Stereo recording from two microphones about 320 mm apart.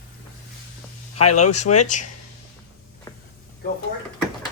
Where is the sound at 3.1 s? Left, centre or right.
Centre.